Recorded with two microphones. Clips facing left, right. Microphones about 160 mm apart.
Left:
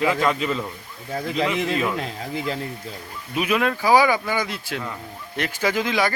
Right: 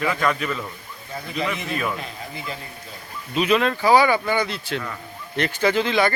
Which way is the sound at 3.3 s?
10° left (ahead or behind).